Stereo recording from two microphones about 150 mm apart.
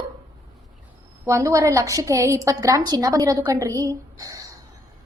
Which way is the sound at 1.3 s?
20° right (ahead or behind).